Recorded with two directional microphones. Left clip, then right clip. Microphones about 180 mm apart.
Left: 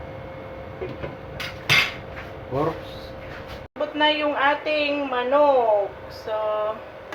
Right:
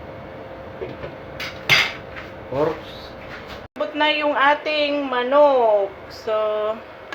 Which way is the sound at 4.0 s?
55° right (ahead or behind).